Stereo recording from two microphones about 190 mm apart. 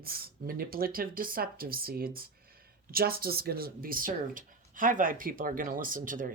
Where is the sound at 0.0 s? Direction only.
50° right (ahead or behind).